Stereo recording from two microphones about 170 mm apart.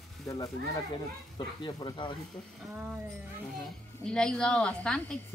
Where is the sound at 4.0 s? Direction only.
5° left (ahead or behind).